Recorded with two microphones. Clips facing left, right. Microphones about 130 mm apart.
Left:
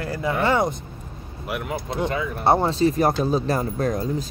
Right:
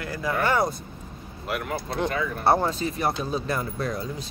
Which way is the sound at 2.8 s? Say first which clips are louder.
Left 8 dB; 40° left (ahead or behind).